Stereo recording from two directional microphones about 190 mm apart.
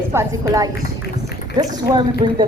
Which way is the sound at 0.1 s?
15° right (ahead or behind).